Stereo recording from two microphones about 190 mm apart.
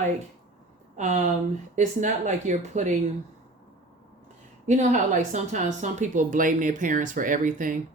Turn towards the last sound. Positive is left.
turn(degrees=-45)  # may be behind; listen again after turning